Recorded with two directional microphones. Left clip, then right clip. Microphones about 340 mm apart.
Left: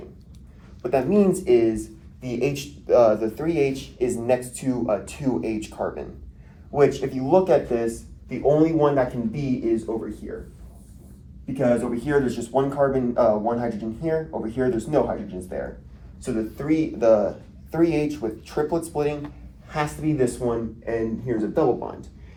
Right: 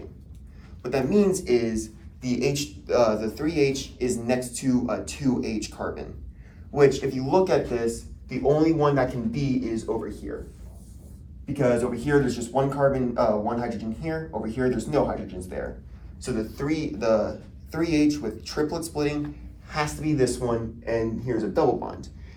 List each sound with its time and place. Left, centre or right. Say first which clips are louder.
0.8 s speech: left 3 dB; centre
11.5 s speech: left 1 dB; centre